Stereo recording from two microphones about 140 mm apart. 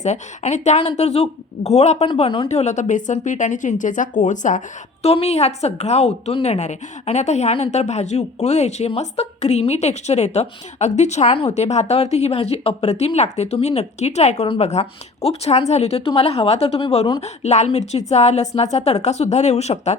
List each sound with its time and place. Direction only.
0.0 s speech: 55° left (ahead or behind)
2.0 s speech: 40° left (ahead or behind)
2.5 s speech: 55° left (ahead or behind)
5.0 s speech: 45° left (ahead or behind)